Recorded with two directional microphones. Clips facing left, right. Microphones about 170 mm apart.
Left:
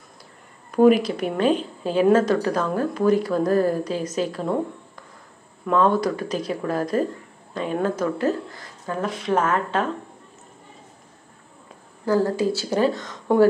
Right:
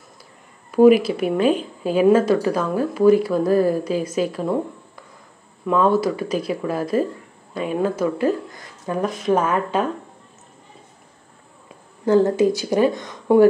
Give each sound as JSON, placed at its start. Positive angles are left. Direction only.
{"t": 0.7, "sound": "speech", "side_deg": -10}
{"t": 5.7, "sound": "speech", "side_deg": -5}
{"t": 12.1, "sound": "speech", "side_deg": -20}